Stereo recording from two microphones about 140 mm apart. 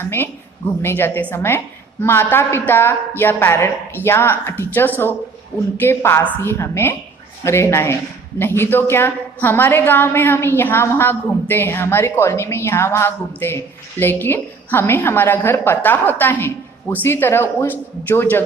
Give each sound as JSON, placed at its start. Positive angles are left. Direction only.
{"t": 0.0, "sound": "a woman's voice", "side_deg": 15}